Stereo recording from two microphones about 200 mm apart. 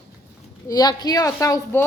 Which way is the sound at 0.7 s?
20° left (ahead or behind).